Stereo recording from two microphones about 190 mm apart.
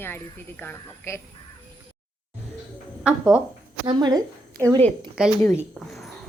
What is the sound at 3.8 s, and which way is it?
Speech, 20° right (ahead or behind).